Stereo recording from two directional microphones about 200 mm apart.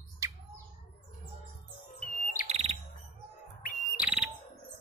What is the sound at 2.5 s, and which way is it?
Bird, 30° right (ahead or behind).